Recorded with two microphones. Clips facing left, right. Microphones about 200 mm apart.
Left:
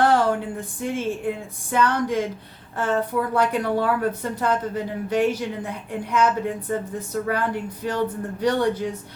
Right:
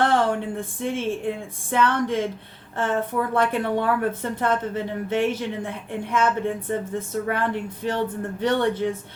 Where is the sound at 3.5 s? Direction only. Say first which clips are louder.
Left 1 dB; 25° right (ahead or behind).